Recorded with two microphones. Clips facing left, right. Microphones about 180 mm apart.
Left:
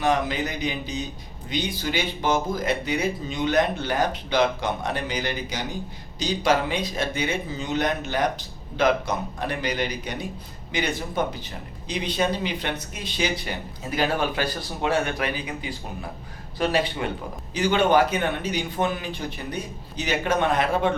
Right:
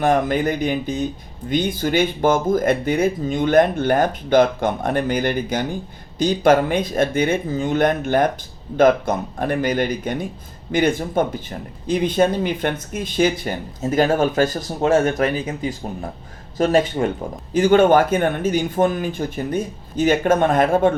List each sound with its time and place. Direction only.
0.0 s speech: 50° right (ahead or behind)